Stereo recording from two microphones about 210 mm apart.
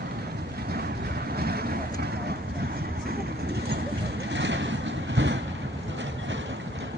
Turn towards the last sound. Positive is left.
turn(degrees=-60)  # may be behind; listen again after turning